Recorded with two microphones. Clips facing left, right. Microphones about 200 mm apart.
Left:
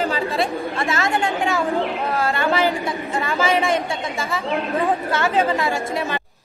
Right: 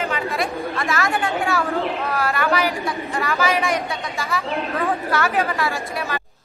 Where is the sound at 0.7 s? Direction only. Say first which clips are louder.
Left 1 dB; 25° left (ahead or behind).